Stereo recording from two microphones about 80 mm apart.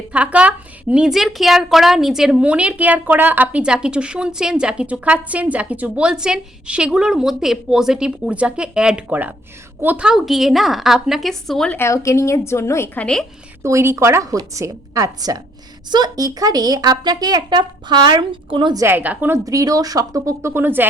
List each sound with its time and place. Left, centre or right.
0.1 s a woman's voice: centre
11.8 s speech: left
13.0 s a woman's voice: centre
13.6 s a woman's voice: right
15.9 s a woman's voice: right
18.9 s a woman's voice: right
19.5 s speech: right